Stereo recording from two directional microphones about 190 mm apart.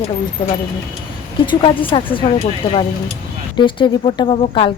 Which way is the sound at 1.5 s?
25° left (ahead or behind).